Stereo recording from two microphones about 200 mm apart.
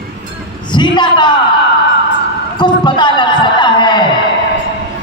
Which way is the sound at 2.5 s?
20° left (ahead or behind).